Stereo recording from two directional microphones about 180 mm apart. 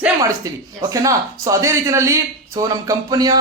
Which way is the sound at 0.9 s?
15° right (ahead or behind).